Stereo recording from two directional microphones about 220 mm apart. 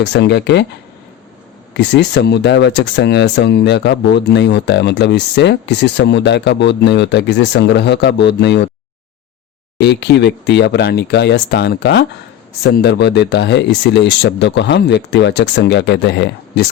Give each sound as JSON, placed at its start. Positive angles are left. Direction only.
{"t": 0.0, "sound": "speech", "side_deg": 50}
{"t": 1.7, "sound": "speech", "side_deg": 50}
{"t": 9.7, "sound": "speech", "side_deg": 50}